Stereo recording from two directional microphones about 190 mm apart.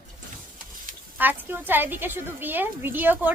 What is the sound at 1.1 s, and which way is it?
A woman's voice, 10° right (ahead or behind).